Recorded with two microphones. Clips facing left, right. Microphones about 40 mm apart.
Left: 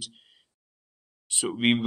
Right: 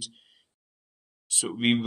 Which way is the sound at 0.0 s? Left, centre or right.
Centre.